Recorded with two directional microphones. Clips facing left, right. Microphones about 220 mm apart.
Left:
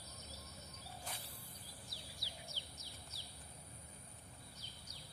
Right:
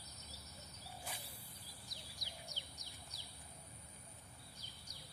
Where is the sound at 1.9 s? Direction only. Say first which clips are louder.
Left 1 dB; 15° right (ahead or behind).